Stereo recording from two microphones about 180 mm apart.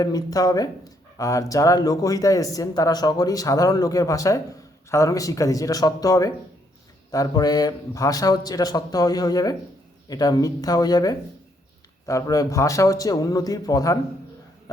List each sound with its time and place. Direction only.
0.0 s speech: 20° left (ahead or behind)